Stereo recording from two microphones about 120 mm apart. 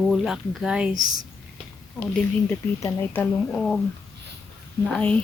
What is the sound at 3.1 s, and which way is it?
Speech, 10° left (ahead or behind).